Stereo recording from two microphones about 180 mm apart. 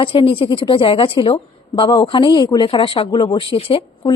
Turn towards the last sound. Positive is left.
turn(degrees=30)  # may be behind; listen again after turning